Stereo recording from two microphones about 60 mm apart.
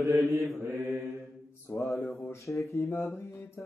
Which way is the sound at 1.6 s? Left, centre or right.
Left.